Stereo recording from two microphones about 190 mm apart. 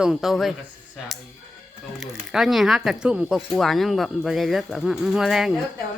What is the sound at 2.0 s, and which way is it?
Speech, centre (ahead or behind).